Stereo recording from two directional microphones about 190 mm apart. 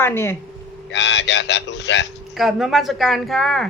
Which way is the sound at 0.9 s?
70° left (ahead or behind).